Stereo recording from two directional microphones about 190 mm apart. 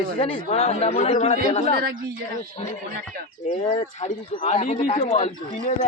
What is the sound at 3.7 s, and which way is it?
Speech, 30° left (ahead or behind).